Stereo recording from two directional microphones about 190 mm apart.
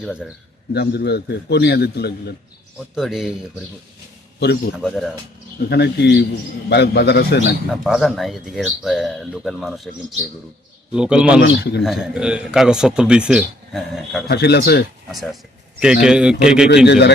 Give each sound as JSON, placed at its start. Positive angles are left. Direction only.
{"t": 0.0, "sound": "speech", "side_deg": -5}
{"t": 0.7, "sound": "a man's voice", "side_deg": 60}
{"t": 2.9, "sound": "speech", "side_deg": 0}
{"t": 4.4, "sound": "a man's voice", "side_deg": 60}
{"t": 4.8, "sound": "speech", "side_deg": 0}
{"t": 5.6, "sound": "a man's voice", "side_deg": 60}
{"t": 7.7, "sound": "speech", "side_deg": 0}
{"t": 11.3, "sound": "a man's voice", "side_deg": 60}
{"t": 11.8, "sound": "speech", "side_deg": 0}
{"t": 14.3, "sound": "a man's voice", "side_deg": 60}
{"t": 15.1, "sound": "speech", "side_deg": 0}
{"t": 16.6, "sound": "a man's voice", "side_deg": 60}